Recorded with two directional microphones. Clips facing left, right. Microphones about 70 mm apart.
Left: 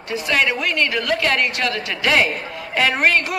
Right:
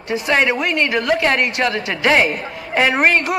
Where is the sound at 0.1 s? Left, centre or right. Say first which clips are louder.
Right 3 dB; right.